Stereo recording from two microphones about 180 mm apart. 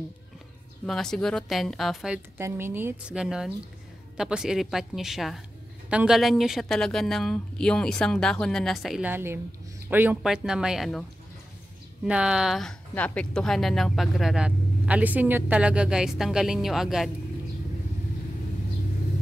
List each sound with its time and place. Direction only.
0.8 s a woman's voice: centre (ahead or behind)
2.3 s a woman's voice: 10° right (ahead or behind)